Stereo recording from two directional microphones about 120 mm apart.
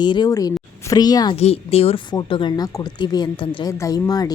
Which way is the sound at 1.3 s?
60° left (ahead or behind).